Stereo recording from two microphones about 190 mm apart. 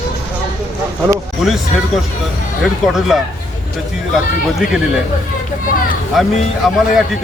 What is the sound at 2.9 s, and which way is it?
Speech, centre (ahead or behind).